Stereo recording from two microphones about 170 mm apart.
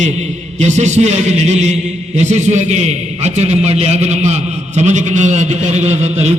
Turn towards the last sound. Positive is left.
turn(degrees=-40)  # may be behind; listen again after turning